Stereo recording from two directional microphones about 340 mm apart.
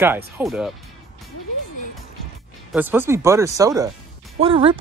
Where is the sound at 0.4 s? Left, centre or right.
Centre.